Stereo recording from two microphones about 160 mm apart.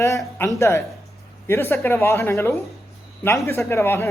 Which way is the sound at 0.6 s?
15° left (ahead or behind).